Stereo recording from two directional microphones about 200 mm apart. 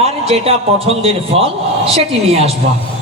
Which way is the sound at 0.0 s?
30° right (ahead or behind).